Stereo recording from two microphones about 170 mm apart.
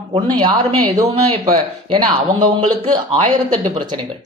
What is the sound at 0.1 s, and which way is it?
Speech, 30° right (ahead or behind).